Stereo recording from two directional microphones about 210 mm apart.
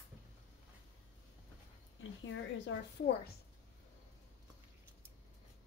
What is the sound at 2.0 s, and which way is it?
Speech, 65° left (ahead or behind).